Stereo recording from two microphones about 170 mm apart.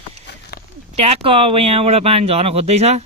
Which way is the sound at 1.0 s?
35° right (ahead or behind).